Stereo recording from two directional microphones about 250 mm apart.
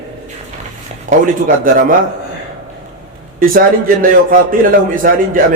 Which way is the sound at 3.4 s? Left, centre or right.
Right.